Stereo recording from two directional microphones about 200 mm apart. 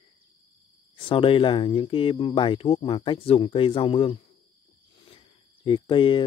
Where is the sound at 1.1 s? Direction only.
25° left (ahead or behind).